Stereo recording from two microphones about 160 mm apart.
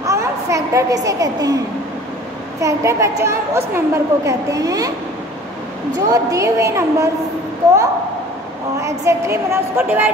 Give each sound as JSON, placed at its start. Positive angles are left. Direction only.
{"t": 0.0, "sound": "a child's voice", "side_deg": -20}
{"t": 2.6, "sound": "a woman's voice", "side_deg": -20}
{"t": 5.9, "sound": "a woman's voice", "side_deg": -20}
{"t": 8.8, "sound": "a woman's voice", "side_deg": -20}